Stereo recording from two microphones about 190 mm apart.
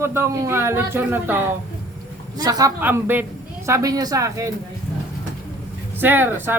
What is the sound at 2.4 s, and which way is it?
A man's voice, 20° right (ahead or behind).